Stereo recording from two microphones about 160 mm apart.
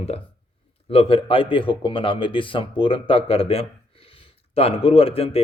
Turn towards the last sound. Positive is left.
turn(degrees=35)  # may be behind; listen again after turning